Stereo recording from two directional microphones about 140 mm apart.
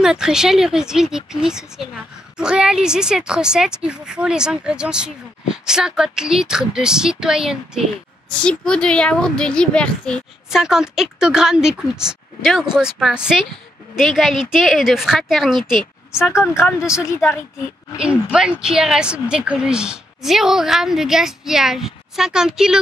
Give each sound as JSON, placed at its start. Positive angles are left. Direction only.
{"t": 0.0, "sound": "a woman's voice", "side_deg": -5}
{"t": 8.3, "sound": "a woman's voice", "side_deg": 5}
{"t": 16.8, "sound": "a woman's voice", "side_deg": 20}
{"t": 17.9, "sound": "a woman's voice", "side_deg": -5}